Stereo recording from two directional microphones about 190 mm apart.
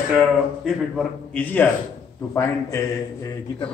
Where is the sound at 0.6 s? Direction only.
5° left (ahead or behind).